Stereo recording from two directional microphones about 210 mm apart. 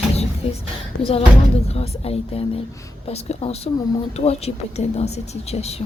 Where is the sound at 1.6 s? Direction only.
30° left (ahead or behind).